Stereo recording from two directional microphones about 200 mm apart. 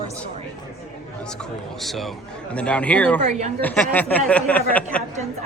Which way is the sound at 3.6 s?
10° left (ahead or behind).